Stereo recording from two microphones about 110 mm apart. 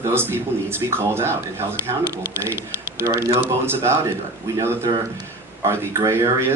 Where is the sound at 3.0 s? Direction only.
30° right (ahead or behind).